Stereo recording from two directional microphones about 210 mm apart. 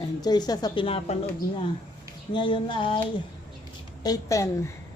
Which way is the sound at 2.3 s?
25° left (ahead or behind).